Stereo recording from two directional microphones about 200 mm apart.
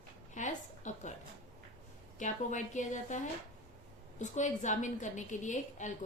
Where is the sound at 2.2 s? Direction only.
40° left (ahead or behind).